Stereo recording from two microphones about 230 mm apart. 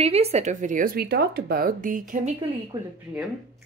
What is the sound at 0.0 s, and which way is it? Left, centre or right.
Speech, right.